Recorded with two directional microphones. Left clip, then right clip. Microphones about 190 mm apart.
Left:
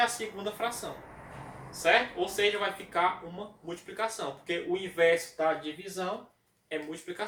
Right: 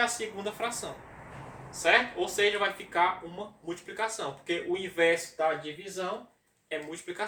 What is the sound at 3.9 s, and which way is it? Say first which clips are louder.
Speech: even; 15° right (ahead or behind).